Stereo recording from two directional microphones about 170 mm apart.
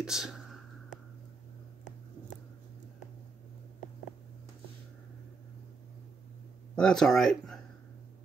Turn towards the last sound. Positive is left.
turn(degrees=0)  # may be behind; listen again after turning